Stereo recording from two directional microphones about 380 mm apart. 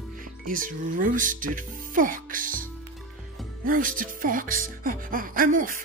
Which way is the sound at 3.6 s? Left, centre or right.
Right.